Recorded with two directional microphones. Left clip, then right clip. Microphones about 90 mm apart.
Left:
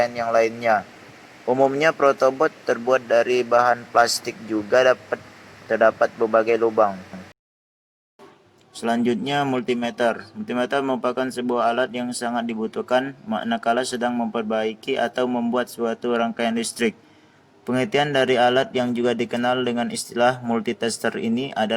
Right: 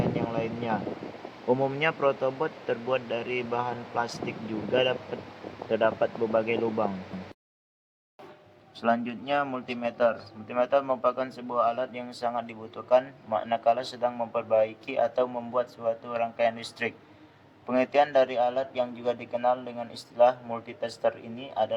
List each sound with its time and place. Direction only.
0.1 s a man's voice: 40° left (ahead or behind)
8.8 s a man's voice: 55° left (ahead or behind); by 21.7 s 40° left (ahead or behind)